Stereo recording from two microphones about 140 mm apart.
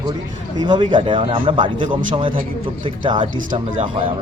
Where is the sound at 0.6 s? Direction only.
35° right (ahead or behind).